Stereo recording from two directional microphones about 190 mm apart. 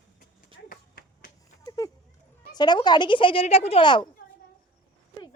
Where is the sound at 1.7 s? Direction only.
20° left (ahead or behind).